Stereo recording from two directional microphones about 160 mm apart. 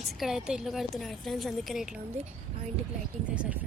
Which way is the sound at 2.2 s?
45° right (ahead or behind).